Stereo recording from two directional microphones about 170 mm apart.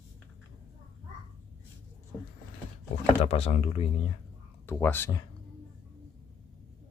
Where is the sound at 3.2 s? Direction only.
35° left (ahead or behind).